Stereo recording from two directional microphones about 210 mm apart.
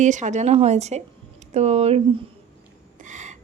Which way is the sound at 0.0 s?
35° right (ahead or behind).